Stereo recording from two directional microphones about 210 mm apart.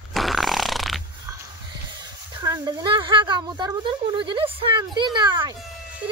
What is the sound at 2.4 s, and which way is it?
A woman's voice, 20° right (ahead or behind).